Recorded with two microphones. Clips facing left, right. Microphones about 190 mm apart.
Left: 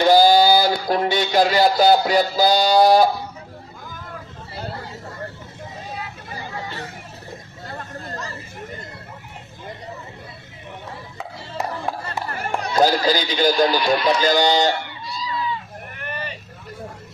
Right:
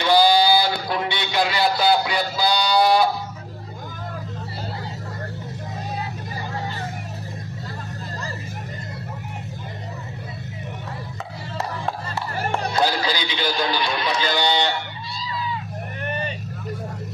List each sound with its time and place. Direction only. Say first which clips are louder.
0.0 s a sound: left 4 dB; 45° left (ahead or behind)
12.8 s a man's voice: left 5 dB; 45° left (ahead or behind)
16.1 s vehicle: right 3 dB; 20° right (ahead or behind)